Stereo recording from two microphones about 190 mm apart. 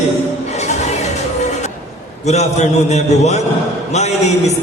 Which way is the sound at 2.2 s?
35° left (ahead or behind).